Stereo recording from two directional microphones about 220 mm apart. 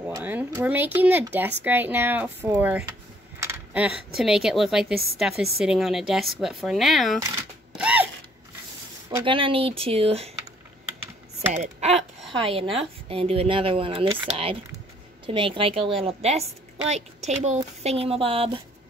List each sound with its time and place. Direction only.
0.0 s speech: 10° right (ahead or behind)
7.7 s a sound: 5° right (ahead or behind)
9.1 s speech: 25° right (ahead or behind)
11.5 s a woman's voice: 30° right (ahead or behind)